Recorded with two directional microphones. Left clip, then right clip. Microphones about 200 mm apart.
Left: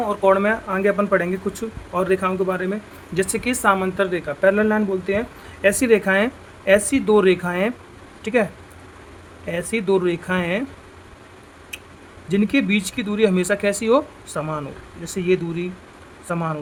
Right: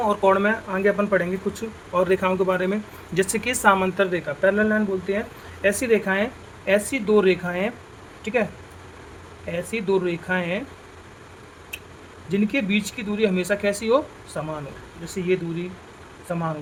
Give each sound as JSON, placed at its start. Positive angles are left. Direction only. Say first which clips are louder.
{"t": 0.1, "sound": "speech", "louder": "left 4 dB", "side_deg": 15}
{"t": 9.5, "sound": "speech", "louder": "left 3 dB", "side_deg": 35}
{"t": 12.3, "sound": "speech", "louder": "left 3 dB", "side_deg": 35}